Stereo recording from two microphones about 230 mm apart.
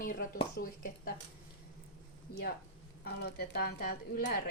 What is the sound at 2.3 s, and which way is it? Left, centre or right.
Speech, left.